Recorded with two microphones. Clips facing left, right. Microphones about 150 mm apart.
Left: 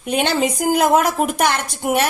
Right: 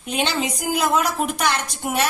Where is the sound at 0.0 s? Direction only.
55° left (ahead or behind).